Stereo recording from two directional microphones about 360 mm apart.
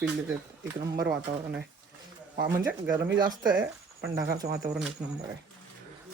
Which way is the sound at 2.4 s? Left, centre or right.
Centre.